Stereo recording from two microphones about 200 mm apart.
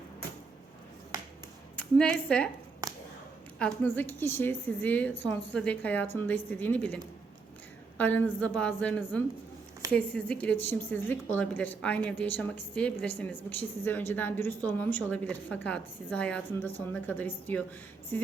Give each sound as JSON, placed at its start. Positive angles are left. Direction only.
{"t": 1.7, "sound": "a woman's voice", "side_deg": 5}
{"t": 3.6, "sound": "speech", "side_deg": 10}